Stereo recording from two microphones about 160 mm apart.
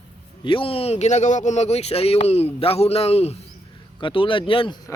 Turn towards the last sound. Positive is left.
turn(degrees=30)  # may be behind; listen again after turning